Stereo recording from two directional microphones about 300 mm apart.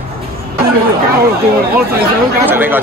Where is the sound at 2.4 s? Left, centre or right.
Centre.